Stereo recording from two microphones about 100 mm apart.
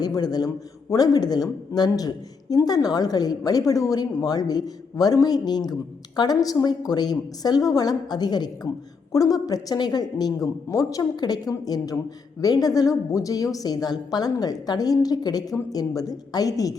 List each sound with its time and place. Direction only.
0.0 s a woman's voice: 45° left (ahead or behind)